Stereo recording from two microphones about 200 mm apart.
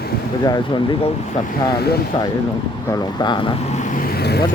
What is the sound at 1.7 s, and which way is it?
Speech, 50° left (ahead or behind).